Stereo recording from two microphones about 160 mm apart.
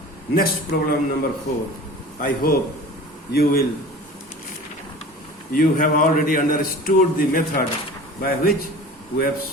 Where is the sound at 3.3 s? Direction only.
75° left (ahead or behind).